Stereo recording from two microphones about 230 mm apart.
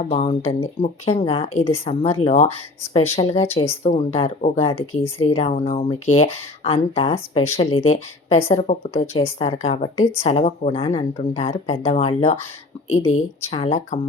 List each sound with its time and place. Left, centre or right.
0.0 s speech: left
12.9 s speech: left
13.5 s speech: left